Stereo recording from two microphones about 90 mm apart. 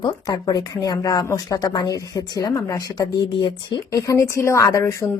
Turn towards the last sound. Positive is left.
turn(degrees=35)  # may be behind; listen again after turning